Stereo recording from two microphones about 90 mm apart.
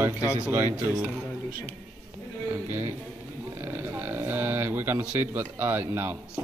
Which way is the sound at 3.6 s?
20° right (ahead or behind).